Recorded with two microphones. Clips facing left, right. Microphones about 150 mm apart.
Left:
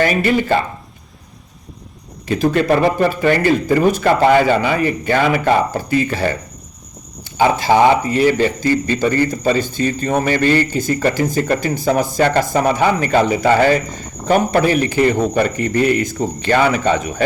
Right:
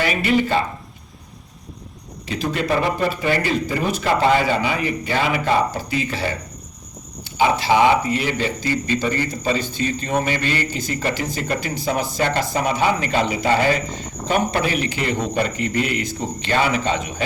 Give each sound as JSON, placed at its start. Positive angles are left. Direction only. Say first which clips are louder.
{"t": 0.0, "sound": "speech", "louder": "left 4 dB", "side_deg": 45}
{"t": 2.2, "sound": "speech", "louder": "left 8 dB", "side_deg": 50}
{"t": 7.3, "sound": "speech", "louder": "left 4 dB", "side_deg": 45}